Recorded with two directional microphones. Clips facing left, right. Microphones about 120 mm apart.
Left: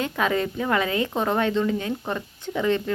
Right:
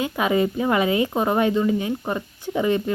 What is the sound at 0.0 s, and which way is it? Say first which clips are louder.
A woman's voice: right 3 dB; 15° right (ahead or behind).